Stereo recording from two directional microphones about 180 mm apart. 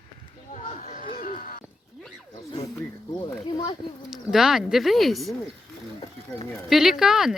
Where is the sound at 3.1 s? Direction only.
20° left (ahead or behind).